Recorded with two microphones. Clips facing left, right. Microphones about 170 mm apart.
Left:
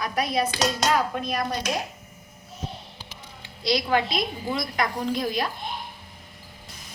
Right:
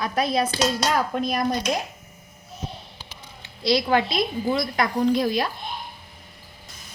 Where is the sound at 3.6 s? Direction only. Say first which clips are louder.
Right 3 dB; 30° right (ahead or behind).